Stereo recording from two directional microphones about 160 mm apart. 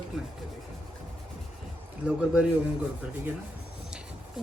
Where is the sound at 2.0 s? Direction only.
5° right (ahead or behind).